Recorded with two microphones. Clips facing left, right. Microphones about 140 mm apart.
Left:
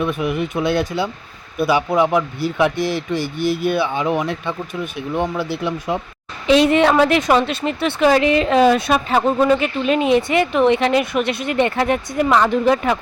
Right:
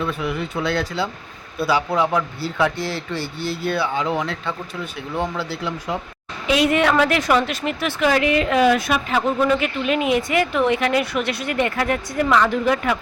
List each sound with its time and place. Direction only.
0.0 s speech: 20° left (ahead or behind)